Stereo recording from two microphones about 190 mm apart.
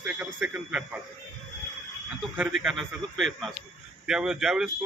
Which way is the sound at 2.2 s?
5° right (ahead or behind).